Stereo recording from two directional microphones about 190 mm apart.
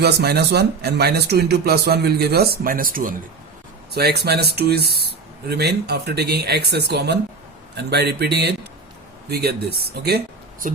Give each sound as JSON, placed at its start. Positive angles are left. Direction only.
{"t": 0.0, "sound": "speech", "side_deg": -60}
{"t": 3.9, "sound": "speech", "side_deg": -55}